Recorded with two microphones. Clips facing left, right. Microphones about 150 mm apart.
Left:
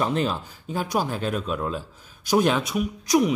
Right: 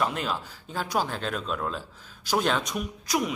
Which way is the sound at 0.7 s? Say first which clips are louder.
Left 3 dB; 15° left (ahead or behind).